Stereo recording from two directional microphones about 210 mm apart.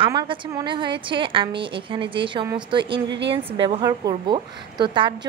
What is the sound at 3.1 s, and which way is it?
Speech, 55° right (ahead or behind).